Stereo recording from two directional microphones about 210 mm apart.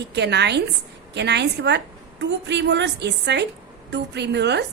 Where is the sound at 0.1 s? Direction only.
55° right (ahead or behind).